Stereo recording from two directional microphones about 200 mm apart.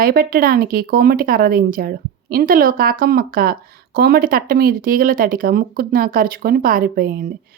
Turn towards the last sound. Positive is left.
turn(degrees=-45)  # may be behind; listen again after turning